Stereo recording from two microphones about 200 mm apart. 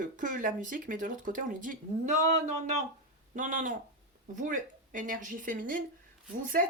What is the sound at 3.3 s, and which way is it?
Speech, 40° right (ahead or behind).